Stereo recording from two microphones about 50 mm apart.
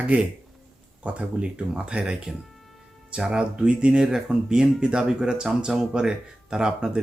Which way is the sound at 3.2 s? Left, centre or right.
Centre.